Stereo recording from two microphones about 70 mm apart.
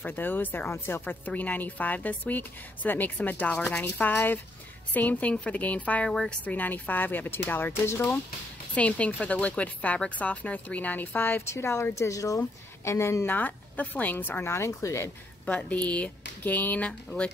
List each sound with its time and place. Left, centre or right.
0.0 s a woman's voice: left
0.7 s a woman's voice: left
1.0 s a woman's voice: left
6.0 s speech: centre
6.4 s a woman's voice: left
8.7 s a woman's voice: centre; by 13.3 s left
13.3 s a woman's voice: left
14.7 s speech: left
15.4 s a woman's voice: centre